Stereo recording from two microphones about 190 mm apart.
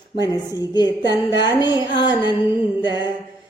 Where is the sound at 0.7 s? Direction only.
20° left (ahead or behind).